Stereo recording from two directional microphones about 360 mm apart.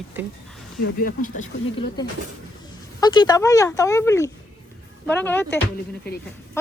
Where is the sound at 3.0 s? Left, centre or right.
Centre.